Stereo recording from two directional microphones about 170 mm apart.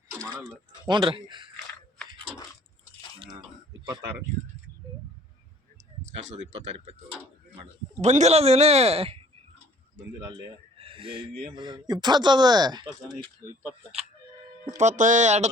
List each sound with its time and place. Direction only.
0.9 s speech: 30° right (ahead or behind)
6.1 s speech: 40° right (ahead or behind)
8.0 s speech: 40° right (ahead or behind)
10.8 s a sound: 30° right (ahead or behind)
11.5 s speech: 25° right (ahead or behind)
13.6 s speech: 10° right (ahead or behind)
14.8 s speech: 45° right (ahead or behind)